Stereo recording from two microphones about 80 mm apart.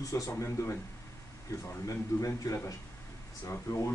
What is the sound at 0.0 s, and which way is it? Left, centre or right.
A man's voice, left.